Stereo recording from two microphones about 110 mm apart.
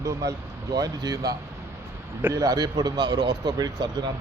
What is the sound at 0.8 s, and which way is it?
A man's voice, 35° right (ahead or behind).